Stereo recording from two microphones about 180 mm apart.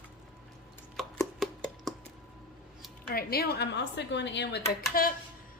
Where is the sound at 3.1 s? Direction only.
60° left (ahead or behind).